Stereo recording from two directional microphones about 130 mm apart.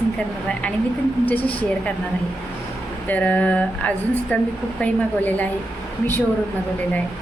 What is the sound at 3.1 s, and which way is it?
A woman's voice, 10° left (ahead or behind).